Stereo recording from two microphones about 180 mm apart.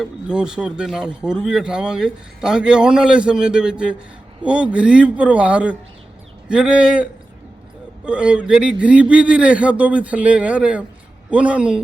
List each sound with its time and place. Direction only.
0.0 s speech: 5° right (ahead or behind)